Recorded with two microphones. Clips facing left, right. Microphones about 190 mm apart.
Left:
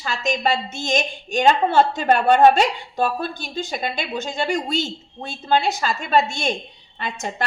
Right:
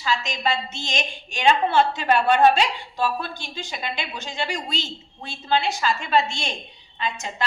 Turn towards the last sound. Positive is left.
turn(degrees=50)  # may be behind; listen again after turning